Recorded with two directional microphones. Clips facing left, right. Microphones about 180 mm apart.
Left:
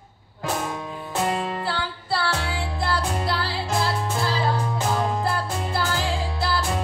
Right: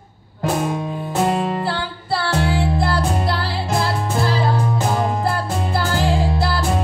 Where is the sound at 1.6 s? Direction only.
50° right (ahead or behind).